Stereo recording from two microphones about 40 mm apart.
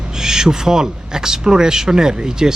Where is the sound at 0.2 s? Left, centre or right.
Centre.